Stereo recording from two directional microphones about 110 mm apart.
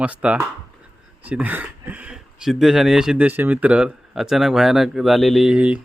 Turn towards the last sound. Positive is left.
turn(degrees=-10)  # may be behind; listen again after turning